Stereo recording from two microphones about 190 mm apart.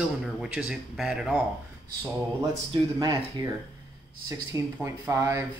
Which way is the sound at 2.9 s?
20° right (ahead or behind).